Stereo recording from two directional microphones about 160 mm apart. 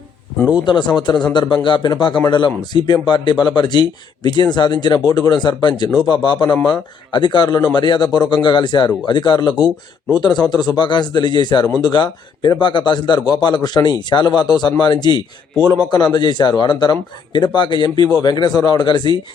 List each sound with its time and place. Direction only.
0.5 s a man's voice: 30° left (ahead or behind)